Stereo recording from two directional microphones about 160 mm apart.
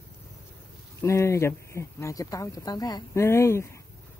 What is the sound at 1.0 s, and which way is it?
Speech, 20° left (ahead or behind).